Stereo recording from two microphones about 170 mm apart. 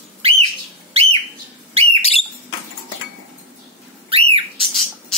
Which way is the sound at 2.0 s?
35° left (ahead or behind).